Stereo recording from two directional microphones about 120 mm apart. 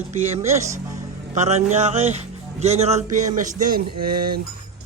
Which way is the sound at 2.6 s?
60° right (ahead or behind).